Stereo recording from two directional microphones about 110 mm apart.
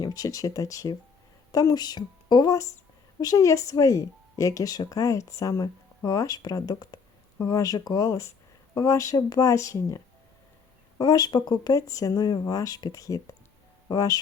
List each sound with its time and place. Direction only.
0.0 s speech: 35° left (ahead or behind)